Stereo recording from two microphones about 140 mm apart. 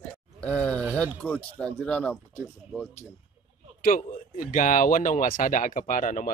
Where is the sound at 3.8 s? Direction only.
75° left (ahead or behind).